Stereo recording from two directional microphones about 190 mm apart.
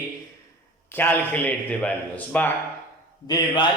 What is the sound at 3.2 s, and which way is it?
Speech, 20° left (ahead or behind).